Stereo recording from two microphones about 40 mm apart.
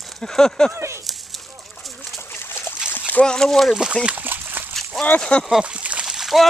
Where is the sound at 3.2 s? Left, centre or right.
Centre.